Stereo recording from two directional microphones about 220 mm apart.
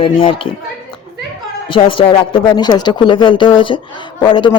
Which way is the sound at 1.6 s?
25° left (ahead or behind).